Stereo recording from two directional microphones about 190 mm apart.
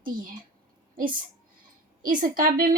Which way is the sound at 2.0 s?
45° right (ahead or behind).